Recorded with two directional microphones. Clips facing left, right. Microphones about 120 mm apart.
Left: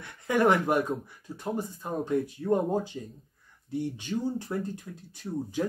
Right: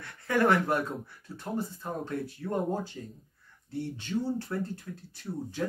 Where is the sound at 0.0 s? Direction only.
15° left (ahead or behind).